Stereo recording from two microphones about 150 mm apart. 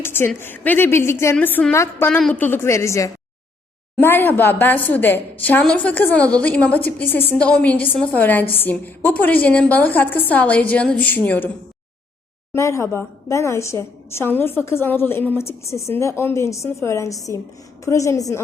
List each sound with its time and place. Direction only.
0.0 s a woman's voice: 15° left (ahead or behind)
12.5 s a woman's voice: 20° left (ahead or behind)